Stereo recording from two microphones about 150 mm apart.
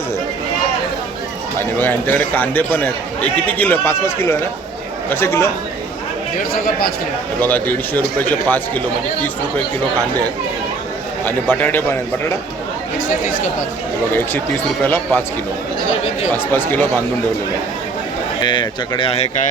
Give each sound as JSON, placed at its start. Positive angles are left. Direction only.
{"t": 1.5, "sound": "a man's voice", "side_deg": 15}
{"t": 6.5, "sound": "speech", "side_deg": 80}
{"t": 7.4, "sound": "a man's voice", "side_deg": 10}
{"t": 11.3, "sound": "a man's voice", "side_deg": 10}
{"t": 13.2, "sound": "speech", "side_deg": 65}
{"t": 14.1, "sound": "a man's voice", "side_deg": 15}
{"t": 16.5, "sound": "a man's voice", "side_deg": 15}
{"t": 18.4, "sound": "speech", "side_deg": 30}